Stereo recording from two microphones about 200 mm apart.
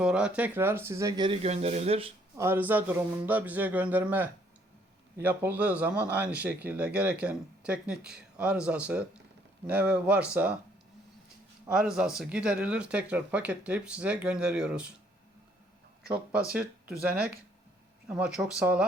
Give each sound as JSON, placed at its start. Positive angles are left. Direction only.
{"t": 0.0, "sound": "speech", "side_deg": -5}
{"t": 2.3, "sound": "speech", "side_deg": -10}
{"t": 11.7, "sound": "speech", "side_deg": -5}
{"t": 16.0, "sound": "speech", "side_deg": -5}
{"t": 16.8, "sound": "speech", "side_deg": -50}
{"t": 18.1, "sound": "speech", "side_deg": -5}